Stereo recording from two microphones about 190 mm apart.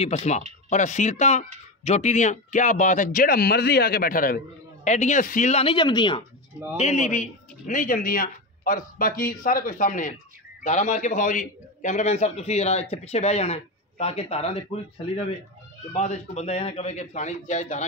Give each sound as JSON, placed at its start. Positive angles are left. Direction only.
{"t": 0.0, "sound": "speech", "side_deg": 35}
{"t": 4.8, "sound": "speech", "side_deg": 40}
{"t": 6.8, "sound": "speech", "side_deg": 40}